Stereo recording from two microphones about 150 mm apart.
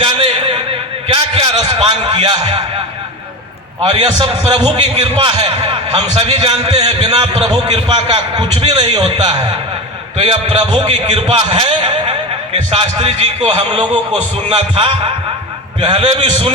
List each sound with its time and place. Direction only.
0.0 s a sound: 35° right (ahead or behind)
3.8 s a man's voice: 35° right (ahead or behind)
7.4 s a man's voice: 30° right (ahead or behind)
8.9 s a man's voice: 45° right (ahead or behind)